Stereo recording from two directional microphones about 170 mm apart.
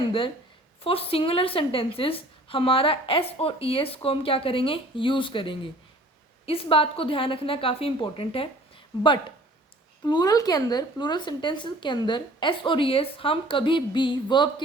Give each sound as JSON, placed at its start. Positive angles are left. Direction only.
{"t": 0.8, "sound": "a woman's voice", "side_deg": 35}
{"t": 10.0, "sound": "speech", "side_deg": 25}